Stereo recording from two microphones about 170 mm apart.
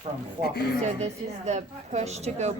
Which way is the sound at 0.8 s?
40° right (ahead or behind).